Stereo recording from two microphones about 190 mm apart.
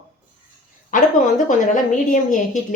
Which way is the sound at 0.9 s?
45° left (ahead or behind).